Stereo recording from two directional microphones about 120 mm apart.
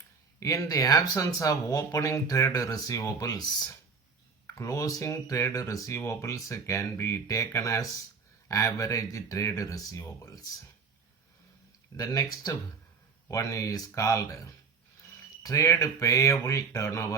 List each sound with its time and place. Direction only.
0.3 s speech: 25° left (ahead or behind)
11.9 s speech: 30° left (ahead or behind)
15.4 s speech: 25° left (ahead or behind)